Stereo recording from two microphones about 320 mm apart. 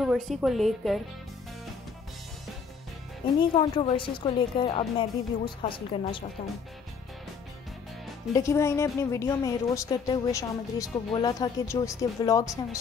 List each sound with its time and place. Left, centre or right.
0.0 s speech: centre
3.3 s a woman's voice: centre
8.4 s a woman's voice: centre